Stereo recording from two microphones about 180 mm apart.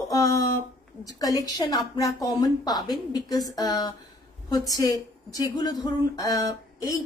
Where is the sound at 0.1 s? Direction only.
15° left (ahead or behind).